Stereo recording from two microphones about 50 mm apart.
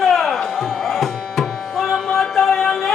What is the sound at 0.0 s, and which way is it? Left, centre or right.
Tabla, centre.